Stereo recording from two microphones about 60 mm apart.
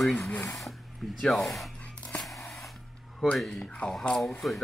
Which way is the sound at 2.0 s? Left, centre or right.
Centre.